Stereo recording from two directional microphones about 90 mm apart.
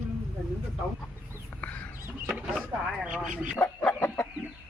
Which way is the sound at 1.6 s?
15° left (ahead or behind).